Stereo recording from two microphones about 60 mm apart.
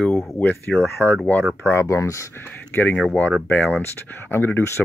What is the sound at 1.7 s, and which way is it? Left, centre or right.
Speech, left.